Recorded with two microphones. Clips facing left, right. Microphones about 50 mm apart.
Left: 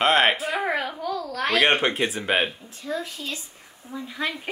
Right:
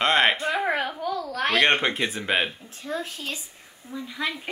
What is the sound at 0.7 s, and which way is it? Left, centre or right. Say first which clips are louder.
Speech: even; right.